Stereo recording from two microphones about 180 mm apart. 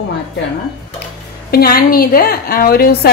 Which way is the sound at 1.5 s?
55° left (ahead or behind).